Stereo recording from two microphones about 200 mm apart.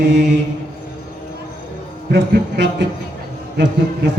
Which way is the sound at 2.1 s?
55° right (ahead or behind).